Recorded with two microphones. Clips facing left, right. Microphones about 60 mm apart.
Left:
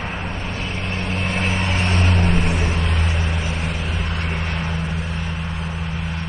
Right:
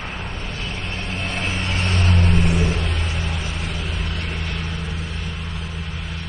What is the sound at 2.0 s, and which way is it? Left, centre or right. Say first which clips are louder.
Vehicle: left 1 dB; centre.